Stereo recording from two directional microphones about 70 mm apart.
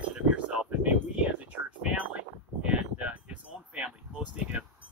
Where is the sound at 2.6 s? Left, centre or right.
Centre.